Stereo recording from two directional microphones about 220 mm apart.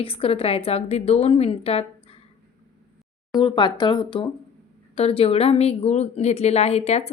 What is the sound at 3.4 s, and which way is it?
Speech, 20° left (ahead or behind).